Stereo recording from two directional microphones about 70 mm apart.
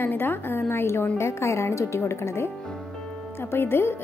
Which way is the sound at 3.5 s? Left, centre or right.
Left.